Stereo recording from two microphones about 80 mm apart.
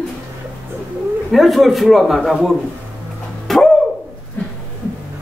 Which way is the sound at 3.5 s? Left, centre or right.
Centre.